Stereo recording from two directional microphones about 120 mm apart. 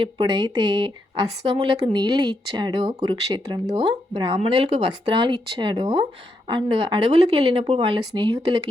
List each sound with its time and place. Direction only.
0.0 s speech: 40° right (ahead or behind)
1.4 s speech: 50° right (ahead or behind)
4.4 s speech: 50° right (ahead or behind)
7.1 s speech: 55° right (ahead or behind)